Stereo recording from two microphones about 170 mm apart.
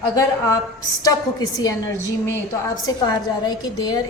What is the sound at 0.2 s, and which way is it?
A woman's voice, 20° left (ahead or behind).